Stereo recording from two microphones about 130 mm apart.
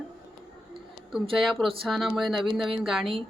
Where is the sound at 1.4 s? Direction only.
Centre (ahead or behind).